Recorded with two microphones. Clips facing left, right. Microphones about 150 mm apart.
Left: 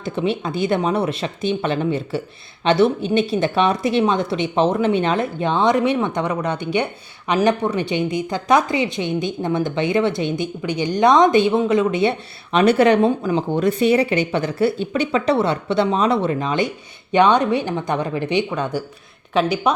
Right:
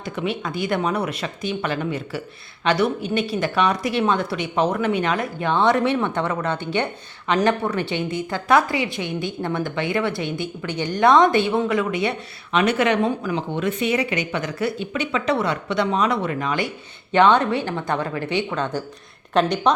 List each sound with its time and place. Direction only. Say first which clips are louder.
0.0 s speech: left 4 dB; 25° left (ahead or behind); by 19.7 s 5° left (ahead or behind)